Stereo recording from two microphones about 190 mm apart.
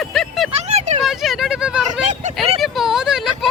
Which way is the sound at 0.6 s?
35° right (ahead or behind).